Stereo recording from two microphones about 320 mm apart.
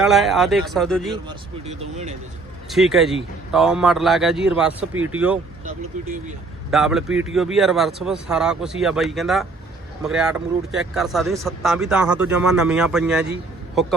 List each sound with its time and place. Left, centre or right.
0.0 s speech: centre
1.1 s speech: centre
2.6 s speech: centre
5.6 s speech: right
6.7 s speech: centre